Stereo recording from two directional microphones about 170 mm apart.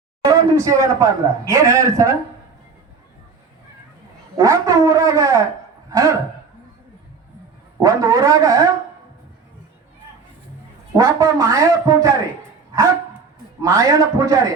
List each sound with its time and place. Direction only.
0.3 s a man's voice: 20° right (ahead or behind)
4.4 s a man's voice: 20° right (ahead or behind)
7.8 s a man's voice: 20° right (ahead or behind)
10.9 s a man's voice: 20° right (ahead or behind)
13.6 s a man's voice: 20° right (ahead or behind)